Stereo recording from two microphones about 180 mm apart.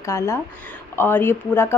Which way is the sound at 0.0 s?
15° left (ahead or behind).